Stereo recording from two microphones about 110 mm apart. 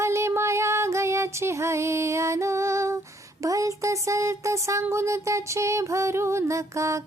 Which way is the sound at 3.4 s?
30° right (ahead or behind).